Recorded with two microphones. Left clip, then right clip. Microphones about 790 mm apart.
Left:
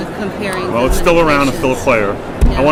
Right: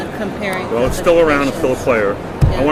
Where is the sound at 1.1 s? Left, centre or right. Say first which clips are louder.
Even; left.